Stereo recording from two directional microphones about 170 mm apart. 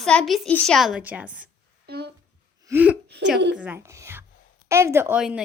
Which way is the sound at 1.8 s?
70° right (ahead or behind).